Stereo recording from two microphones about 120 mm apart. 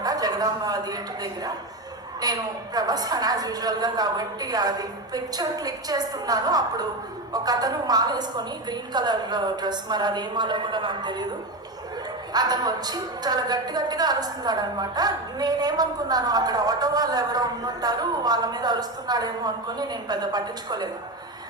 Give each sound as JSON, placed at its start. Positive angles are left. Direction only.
{"t": 0.0, "sound": "a woman's voice", "side_deg": -30}
{"t": 12.3, "sound": "speech", "side_deg": -35}